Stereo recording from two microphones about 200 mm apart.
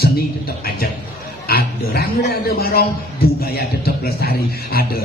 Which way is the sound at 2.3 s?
50° left (ahead or behind).